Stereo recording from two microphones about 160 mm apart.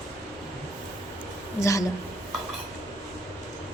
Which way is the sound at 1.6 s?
20° left (ahead or behind).